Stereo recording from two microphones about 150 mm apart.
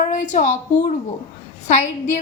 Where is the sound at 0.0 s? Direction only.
55° left (ahead or behind).